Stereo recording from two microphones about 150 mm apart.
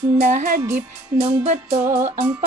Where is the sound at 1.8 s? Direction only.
15° right (ahead or behind).